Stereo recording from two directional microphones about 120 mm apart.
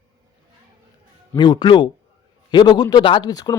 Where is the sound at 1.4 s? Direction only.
40° left (ahead or behind).